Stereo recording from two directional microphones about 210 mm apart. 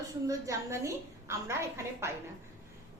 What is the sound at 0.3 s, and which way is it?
A woman's voice, 15° right (ahead or behind).